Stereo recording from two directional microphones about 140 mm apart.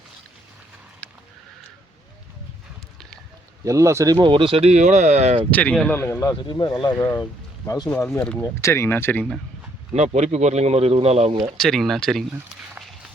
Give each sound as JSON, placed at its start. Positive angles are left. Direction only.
{"t": 3.6, "sound": "speech", "side_deg": -20}
{"t": 5.5, "sound": "speech", "side_deg": 10}
{"t": 7.9, "sound": "speech", "side_deg": 15}
{"t": 9.9, "sound": "speech", "side_deg": -55}
{"t": 11.5, "sound": "speech", "side_deg": 0}